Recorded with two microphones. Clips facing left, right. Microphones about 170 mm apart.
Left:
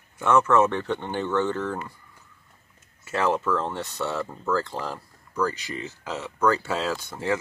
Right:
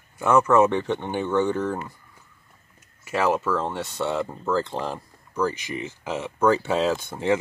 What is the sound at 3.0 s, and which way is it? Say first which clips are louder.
Speech: right 1 dB; 10° right (ahead or behind).